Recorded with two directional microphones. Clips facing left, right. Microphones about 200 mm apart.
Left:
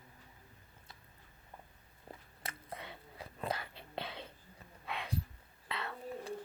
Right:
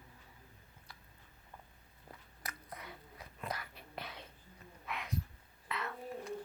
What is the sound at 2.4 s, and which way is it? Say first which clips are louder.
Whispering: left 2 dB; 25° left (ahead or behind).